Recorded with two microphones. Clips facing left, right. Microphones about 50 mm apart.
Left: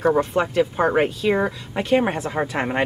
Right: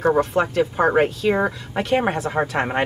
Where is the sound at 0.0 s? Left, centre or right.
Centre.